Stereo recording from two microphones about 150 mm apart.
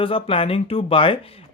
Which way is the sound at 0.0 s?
35° left (ahead or behind).